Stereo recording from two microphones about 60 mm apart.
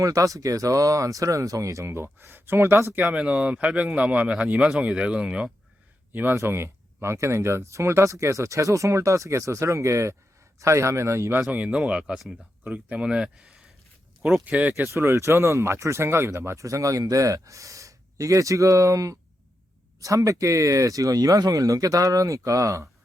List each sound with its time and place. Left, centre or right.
0.0 s speech: right
2.9 s speech: right
6.3 s speech: right
11.5 s speech: right
14.2 s speech: right
14.9 s speech: right